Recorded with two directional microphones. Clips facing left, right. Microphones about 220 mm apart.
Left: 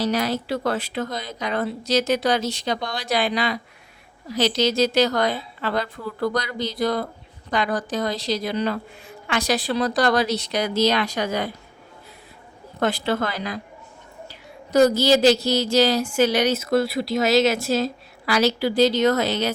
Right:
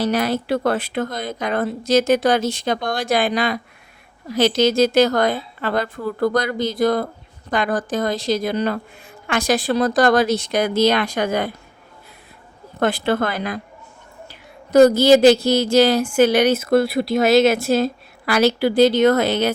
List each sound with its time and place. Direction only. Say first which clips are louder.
0.0 s speech: right 3 dB; 55° right (ahead or behind)
12.8 s speech: right 3 dB; 55° right (ahead or behind)